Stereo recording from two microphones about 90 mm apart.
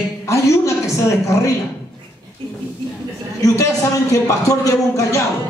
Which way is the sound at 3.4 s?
35° left (ahead or behind).